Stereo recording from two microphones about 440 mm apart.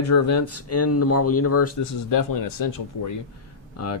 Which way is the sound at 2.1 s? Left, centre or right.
Left.